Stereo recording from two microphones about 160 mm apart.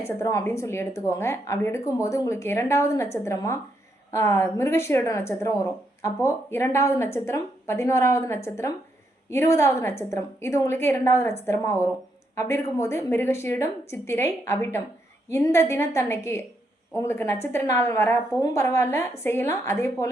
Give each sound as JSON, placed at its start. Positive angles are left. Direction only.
{"t": 0.0, "sound": "a woman's voice", "side_deg": 20}